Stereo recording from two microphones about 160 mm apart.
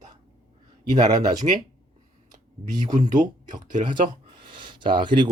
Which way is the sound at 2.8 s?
50° right (ahead or behind).